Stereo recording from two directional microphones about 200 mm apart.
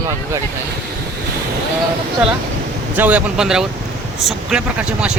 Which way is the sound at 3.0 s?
5° right (ahead or behind).